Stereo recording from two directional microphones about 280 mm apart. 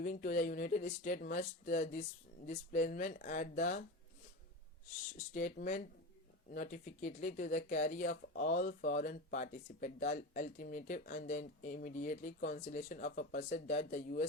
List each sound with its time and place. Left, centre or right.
0.0 s speech: left
5.1 s speech: left